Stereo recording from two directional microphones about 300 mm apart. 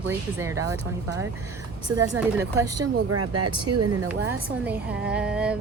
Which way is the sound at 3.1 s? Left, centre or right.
Right.